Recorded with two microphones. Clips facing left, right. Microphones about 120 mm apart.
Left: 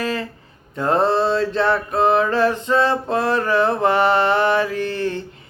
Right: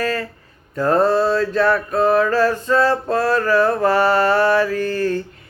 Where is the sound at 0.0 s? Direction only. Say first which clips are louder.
Right 2 dB; 20° left (ahead or behind).